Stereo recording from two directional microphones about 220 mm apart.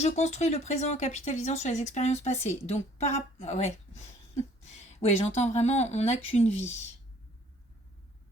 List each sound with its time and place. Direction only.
0.0 s speech: 30° left (ahead or behind)
4.9 s speech: 30° left (ahead or behind)